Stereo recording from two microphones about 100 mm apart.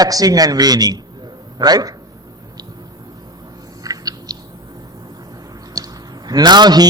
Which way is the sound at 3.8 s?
40° right (ahead or behind).